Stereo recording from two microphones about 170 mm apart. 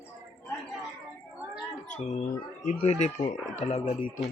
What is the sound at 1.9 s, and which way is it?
Speech, 45° left (ahead or behind).